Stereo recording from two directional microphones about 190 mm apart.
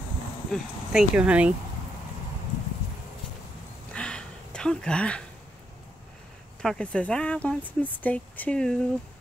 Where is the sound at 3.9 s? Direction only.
5° left (ahead or behind).